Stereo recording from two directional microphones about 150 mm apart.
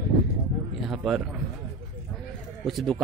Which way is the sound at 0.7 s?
5° right (ahead or behind).